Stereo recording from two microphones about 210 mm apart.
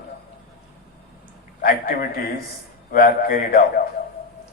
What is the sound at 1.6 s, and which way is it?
Speech, 40° left (ahead or behind).